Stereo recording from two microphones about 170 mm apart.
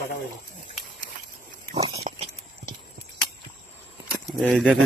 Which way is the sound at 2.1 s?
45° right (ahead or behind).